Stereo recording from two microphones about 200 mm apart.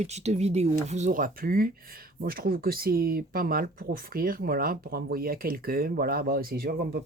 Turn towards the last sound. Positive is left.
turn(degrees=-50)  # may be behind; listen again after turning